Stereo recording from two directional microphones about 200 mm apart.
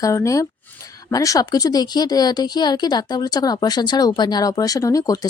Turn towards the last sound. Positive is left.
turn(degrees=20)  # may be behind; listen again after turning